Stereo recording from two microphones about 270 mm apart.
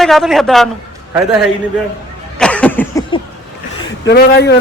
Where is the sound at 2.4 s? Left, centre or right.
Centre.